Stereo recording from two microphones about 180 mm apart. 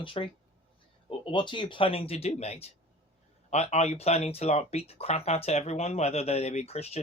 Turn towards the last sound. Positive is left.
turn(degrees=35)  # may be behind; listen again after turning